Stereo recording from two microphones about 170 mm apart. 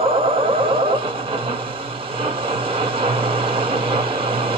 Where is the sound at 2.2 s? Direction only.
30° right (ahead or behind).